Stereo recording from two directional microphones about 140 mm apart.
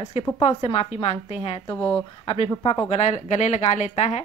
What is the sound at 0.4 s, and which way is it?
Speech, 45° left (ahead or behind).